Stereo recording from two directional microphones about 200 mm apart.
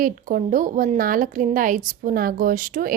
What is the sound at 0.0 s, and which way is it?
Speech, 40° right (ahead or behind).